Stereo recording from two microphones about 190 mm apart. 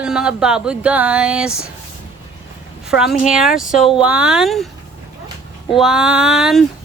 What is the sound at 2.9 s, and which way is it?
A woman's voice, 5° right (ahead or behind).